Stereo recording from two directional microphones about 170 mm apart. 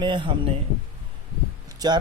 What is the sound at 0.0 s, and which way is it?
Speech, 30° right (ahead or behind).